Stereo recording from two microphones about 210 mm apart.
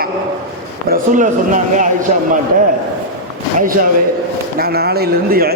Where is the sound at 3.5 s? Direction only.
40° right (ahead or behind).